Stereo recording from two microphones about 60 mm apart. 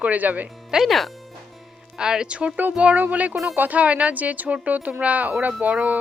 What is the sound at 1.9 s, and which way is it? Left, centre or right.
Speech, centre.